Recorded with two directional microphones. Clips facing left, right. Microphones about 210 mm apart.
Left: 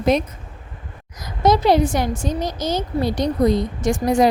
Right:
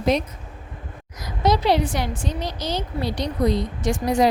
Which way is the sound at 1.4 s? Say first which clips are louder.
Left 4 dB; 45° left (ahead or behind).